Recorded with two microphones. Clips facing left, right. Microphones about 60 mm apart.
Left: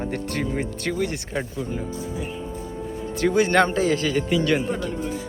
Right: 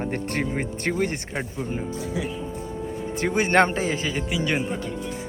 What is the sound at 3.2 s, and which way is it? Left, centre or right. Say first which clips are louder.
Speech: left 1 dB; right.